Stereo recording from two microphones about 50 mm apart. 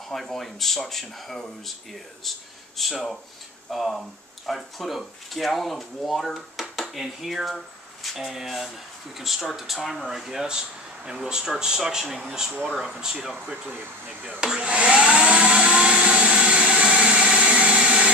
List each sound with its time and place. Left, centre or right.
0.1 s speech: centre
14.4 s vacuum cleaner: centre